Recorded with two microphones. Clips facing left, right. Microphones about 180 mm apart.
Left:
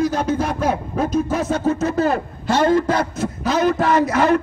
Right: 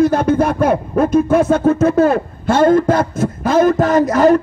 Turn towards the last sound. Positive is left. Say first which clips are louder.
# right 5 dB
turn(degrees=-45)  # may be behind; listen again after turning